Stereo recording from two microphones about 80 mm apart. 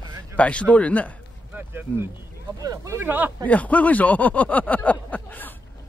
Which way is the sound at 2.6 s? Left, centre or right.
Right.